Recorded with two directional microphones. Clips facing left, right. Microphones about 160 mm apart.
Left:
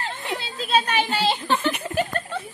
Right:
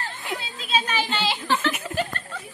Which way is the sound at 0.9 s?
65° left (ahead or behind).